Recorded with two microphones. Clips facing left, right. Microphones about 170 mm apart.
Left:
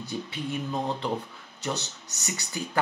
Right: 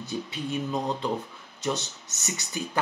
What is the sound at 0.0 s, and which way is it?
Speech, 20° right (ahead or behind).